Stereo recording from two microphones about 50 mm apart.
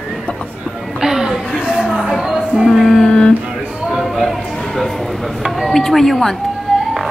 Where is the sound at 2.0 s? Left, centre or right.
Centre.